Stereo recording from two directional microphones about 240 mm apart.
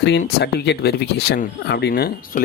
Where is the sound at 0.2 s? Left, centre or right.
Left.